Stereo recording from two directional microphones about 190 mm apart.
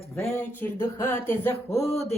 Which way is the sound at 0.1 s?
15° left (ahead or behind).